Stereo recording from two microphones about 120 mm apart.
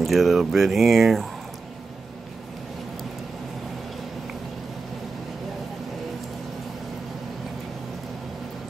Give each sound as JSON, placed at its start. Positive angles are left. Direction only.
{"t": 0.0, "sound": "speech", "side_deg": 0}